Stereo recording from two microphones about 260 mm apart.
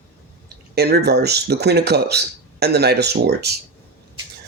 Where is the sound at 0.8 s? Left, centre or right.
Right.